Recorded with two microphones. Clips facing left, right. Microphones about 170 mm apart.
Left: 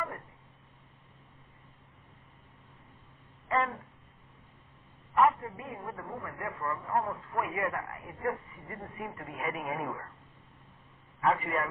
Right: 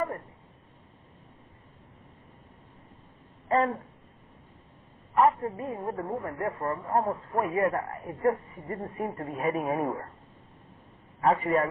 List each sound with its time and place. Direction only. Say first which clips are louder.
3.5 s speech: right 5 dB; 40° right (ahead or behind)
5.1 s a man's voice: right 3 dB; 35° right (ahead or behind)
11.2 s a man's voice: right 5 dB; 40° right (ahead or behind)